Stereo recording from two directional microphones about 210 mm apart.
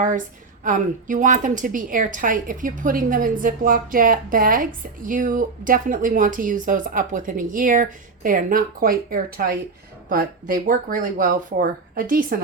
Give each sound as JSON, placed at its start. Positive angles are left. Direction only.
{"t": 0.6, "sound": "a woman's voice", "side_deg": -40}